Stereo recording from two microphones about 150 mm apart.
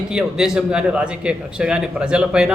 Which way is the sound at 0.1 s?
5° right (ahead or behind).